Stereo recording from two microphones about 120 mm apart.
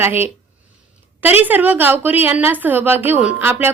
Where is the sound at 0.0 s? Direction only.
20° right (ahead or behind).